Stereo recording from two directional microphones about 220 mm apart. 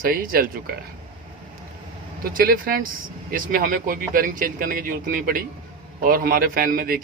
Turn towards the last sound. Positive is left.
turn(degrees=-40)  # may be behind; listen again after turning